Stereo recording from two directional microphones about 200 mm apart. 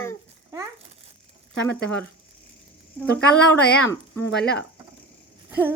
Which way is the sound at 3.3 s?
5° left (ahead or behind).